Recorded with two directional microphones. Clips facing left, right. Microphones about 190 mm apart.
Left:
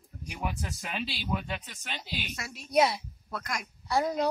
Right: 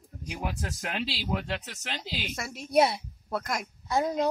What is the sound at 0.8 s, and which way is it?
Speech, 85° right.